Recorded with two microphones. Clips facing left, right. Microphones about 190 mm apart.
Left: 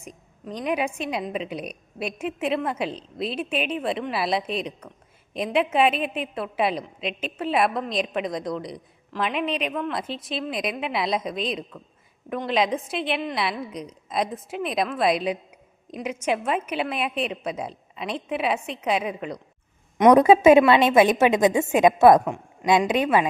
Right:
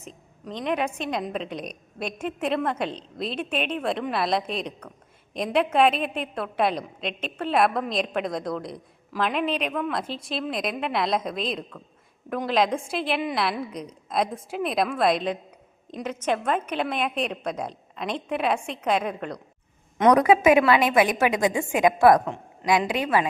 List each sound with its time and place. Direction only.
0.4 s a woman's voice: 5° left (ahead or behind)
20.0 s a woman's voice: 25° left (ahead or behind)